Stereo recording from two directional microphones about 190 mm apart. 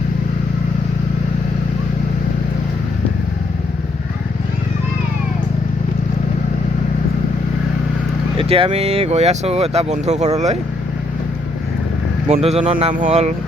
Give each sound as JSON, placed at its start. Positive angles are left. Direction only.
{"t": 8.4, "sound": "speech", "side_deg": -30}
{"t": 12.3, "sound": "speech", "side_deg": -30}